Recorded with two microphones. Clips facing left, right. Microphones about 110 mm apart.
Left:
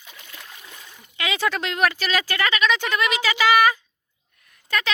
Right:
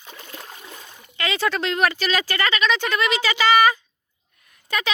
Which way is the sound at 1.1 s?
10° left (ahead or behind).